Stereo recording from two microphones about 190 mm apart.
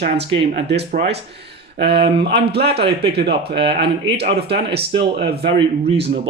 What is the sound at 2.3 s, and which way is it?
Speech, 60° right (ahead or behind).